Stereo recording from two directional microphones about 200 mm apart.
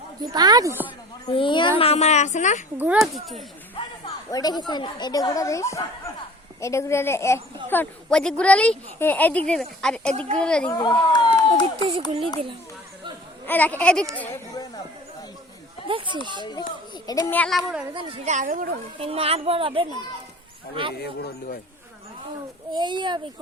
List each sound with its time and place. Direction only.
0.2 s a woman's voice: 20° right (ahead or behind)
1.2 s a child's voice: 25° left (ahead or behind)
2.7 s a woman's voice: 5° right (ahead or behind)
3.8 s a woman's voice: 20° left (ahead or behind); by 10.7 s 5° left (ahead or behind)
10.7 s a child's voice: 20° left (ahead or behind)
11.6 s a child's voice: 30° right (ahead or behind)
13.4 s a woman's voice: 10° left (ahead or behind)
15.9 s a child's voice: 25° right (ahead or behind)
16.4 s a child's voice: 20° left (ahead or behind)
17.9 s a woman's voice: 35° right (ahead or behind)
18.9 s a child's voice: 30° right (ahead or behind)
21.0 s speech: 50° left (ahead or behind)
22.7 s a child's voice: 20° right (ahead or behind)